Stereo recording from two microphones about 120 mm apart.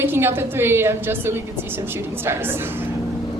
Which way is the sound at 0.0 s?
20° right (ahead or behind).